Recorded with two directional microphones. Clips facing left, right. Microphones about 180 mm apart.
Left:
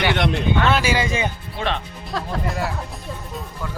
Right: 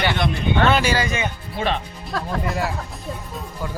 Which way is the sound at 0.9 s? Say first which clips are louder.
Left 1 dB; 30° left (ahead or behind).